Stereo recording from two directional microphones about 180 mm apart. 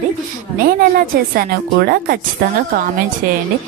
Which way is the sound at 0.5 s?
55° right (ahead or behind).